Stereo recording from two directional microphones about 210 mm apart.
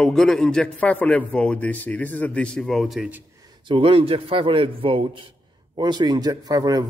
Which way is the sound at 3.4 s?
20° right (ahead or behind).